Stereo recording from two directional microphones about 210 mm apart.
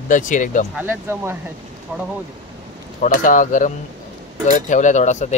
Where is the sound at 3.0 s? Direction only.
40° left (ahead or behind).